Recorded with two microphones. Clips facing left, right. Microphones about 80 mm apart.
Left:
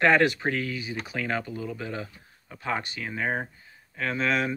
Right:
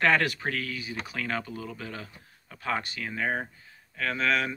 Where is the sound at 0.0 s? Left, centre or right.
Centre.